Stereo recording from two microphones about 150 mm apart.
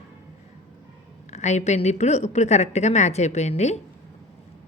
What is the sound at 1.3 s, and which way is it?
Speech, 50° left (ahead or behind).